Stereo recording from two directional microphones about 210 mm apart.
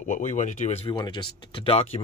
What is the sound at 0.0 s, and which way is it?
Speech, 35° left (ahead or behind).